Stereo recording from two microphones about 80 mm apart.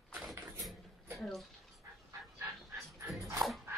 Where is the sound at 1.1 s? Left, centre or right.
Centre.